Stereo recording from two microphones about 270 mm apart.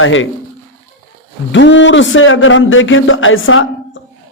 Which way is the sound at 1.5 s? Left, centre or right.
Left.